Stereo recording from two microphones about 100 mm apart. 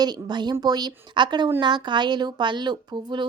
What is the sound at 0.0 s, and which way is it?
A woman's voice, 45° right (ahead or behind).